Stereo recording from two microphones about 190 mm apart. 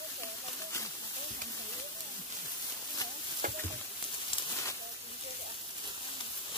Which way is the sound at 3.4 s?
45° right (ahead or behind).